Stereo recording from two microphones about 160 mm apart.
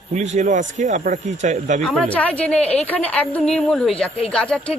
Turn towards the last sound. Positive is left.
turn(degrees=5)  # may be behind; listen again after turning